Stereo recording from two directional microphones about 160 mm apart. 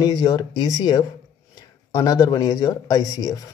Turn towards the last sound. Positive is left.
turn(degrees=20)  # may be behind; listen again after turning